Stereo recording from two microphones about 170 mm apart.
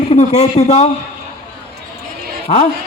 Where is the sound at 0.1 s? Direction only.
45° left (ahead or behind).